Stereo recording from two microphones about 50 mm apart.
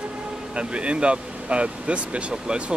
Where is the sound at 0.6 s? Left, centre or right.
Right.